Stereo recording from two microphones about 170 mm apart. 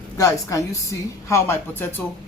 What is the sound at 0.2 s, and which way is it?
A woman's voice, 20° left (ahead or behind).